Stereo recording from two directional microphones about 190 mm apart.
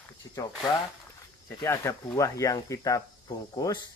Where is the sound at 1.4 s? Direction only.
15° left (ahead or behind).